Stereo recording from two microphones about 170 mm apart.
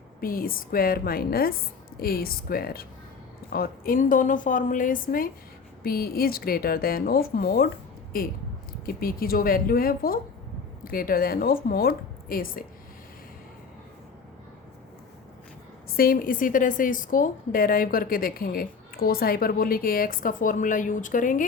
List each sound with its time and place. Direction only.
0.2 s a woman's voice: 55° left (ahead or behind)
15.9 s a woman's voice: 60° left (ahead or behind)